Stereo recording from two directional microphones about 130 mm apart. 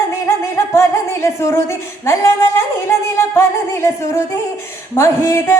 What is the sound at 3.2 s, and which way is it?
Music, 20° left (ahead or behind).